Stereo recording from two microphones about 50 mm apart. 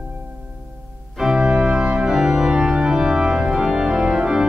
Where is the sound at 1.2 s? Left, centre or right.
Centre.